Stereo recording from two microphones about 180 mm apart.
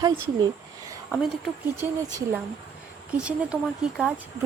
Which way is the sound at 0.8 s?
20° right (ahead or behind).